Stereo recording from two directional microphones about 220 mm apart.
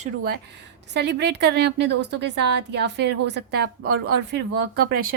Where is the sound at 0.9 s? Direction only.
50° right (ahead or behind).